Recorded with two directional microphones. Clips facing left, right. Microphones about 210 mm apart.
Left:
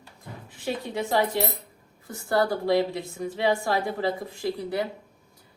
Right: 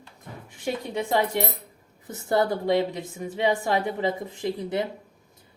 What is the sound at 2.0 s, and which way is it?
A woman's voice, 20° right (ahead or behind).